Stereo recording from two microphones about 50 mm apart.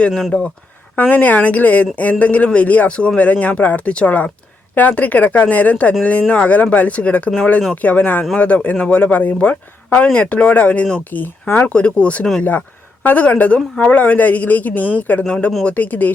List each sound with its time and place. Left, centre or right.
0.1 s speech: centre
0.9 s speech: left
11.7 s speech: left
12.4 s speech: left
15.3 s speech: left
15.6 s speech: left